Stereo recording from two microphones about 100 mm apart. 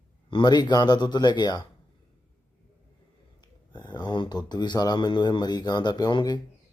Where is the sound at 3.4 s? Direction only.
50° left (ahead or behind).